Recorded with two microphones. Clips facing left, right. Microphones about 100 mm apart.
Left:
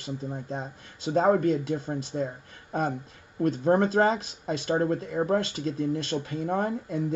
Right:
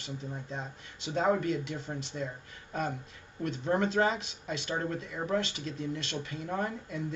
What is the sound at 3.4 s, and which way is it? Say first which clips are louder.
Speech: left 7 dB; 45° left (ahead or behind).